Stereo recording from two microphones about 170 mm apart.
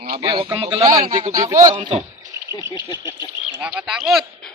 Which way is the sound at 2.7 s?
25° left (ahead or behind).